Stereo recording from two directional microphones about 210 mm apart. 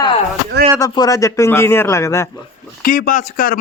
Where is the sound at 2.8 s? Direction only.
45° left (ahead or behind).